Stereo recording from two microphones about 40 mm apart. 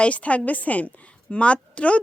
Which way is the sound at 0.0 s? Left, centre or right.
Left.